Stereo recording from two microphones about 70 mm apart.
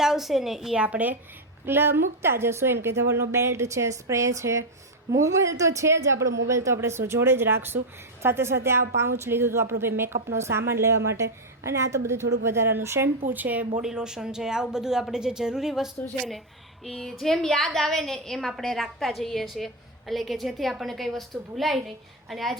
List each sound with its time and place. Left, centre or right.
0.0 s a woman's voice: centre
0.8 s speech: right
1.6 s a woman's voice: right
13.3 s speech: right
13.8 s speech: centre
16.8 s a woman's voice: centre